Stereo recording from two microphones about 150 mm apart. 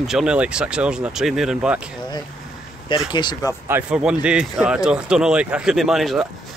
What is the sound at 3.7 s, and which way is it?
Speech, 5° right (ahead or behind).